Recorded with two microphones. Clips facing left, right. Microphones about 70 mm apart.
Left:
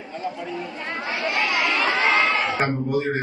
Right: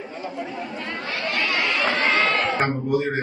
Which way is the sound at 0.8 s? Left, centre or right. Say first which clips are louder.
Left 3 dB; centre.